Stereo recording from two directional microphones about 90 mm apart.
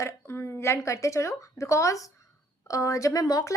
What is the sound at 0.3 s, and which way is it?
A woman's voice, 30° left (ahead or behind).